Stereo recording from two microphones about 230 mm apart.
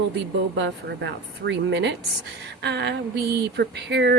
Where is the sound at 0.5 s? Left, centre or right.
Right.